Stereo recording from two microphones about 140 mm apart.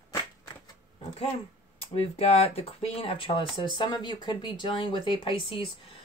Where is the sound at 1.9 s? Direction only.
45° left (ahead or behind).